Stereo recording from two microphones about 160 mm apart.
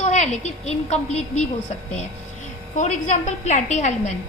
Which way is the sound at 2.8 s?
50° left (ahead or behind).